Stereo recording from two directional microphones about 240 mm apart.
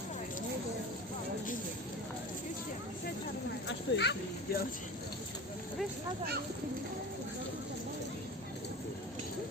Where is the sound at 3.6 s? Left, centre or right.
Left.